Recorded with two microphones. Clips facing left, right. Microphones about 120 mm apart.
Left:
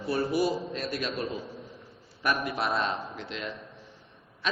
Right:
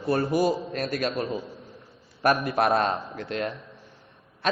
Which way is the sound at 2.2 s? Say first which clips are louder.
Right 7 dB; 50° right (ahead or behind).